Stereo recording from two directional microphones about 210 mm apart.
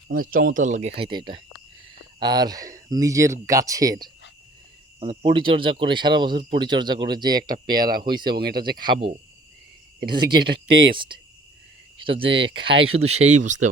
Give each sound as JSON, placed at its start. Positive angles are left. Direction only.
{"t": 0.3, "sound": "speech", "side_deg": -40}
{"t": 7.7, "sound": "speech", "side_deg": -45}
{"t": 8.0, "sound": "speech", "side_deg": -20}
{"t": 8.4, "sound": "speech", "side_deg": -50}
{"t": 8.8, "sound": "speech", "side_deg": -25}
{"t": 10.0, "sound": "speech", "side_deg": -50}
{"t": 10.9, "sound": "speech", "side_deg": -25}